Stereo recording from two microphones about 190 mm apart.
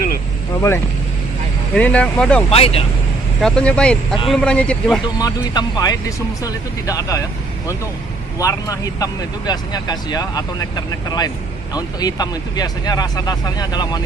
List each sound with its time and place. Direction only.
1.8 s speech: 5° left (ahead or behind)
2.5 s speech: 30° left (ahead or behind)
3.3 s speech: 5° left (ahead or behind)
5.2 s speech: 20° left (ahead or behind)